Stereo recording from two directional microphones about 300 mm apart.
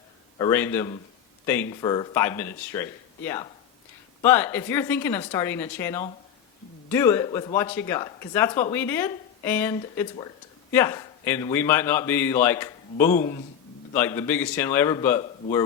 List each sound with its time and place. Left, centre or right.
0.3 s a man's voice: centre